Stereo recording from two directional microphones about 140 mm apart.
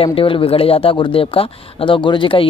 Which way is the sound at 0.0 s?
40° left (ahead or behind).